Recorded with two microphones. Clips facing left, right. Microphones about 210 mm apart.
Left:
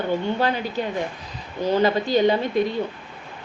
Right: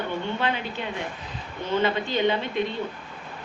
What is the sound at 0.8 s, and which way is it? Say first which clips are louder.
A woman's voice: left 6 dB; 40° left (ahead or behind).